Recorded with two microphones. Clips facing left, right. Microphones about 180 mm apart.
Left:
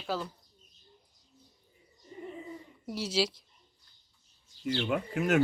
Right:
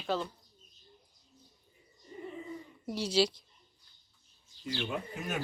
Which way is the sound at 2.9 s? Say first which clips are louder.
Right 2 dB; 5° left (ahead or behind).